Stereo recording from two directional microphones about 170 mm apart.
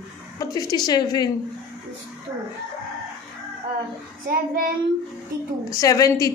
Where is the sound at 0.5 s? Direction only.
20° left (ahead or behind).